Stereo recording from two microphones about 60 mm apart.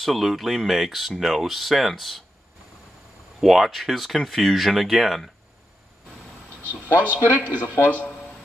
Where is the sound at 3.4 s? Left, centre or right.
Centre.